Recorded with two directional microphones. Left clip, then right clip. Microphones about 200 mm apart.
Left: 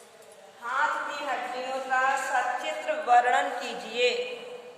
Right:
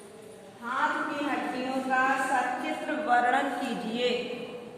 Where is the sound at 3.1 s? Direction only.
35° left (ahead or behind).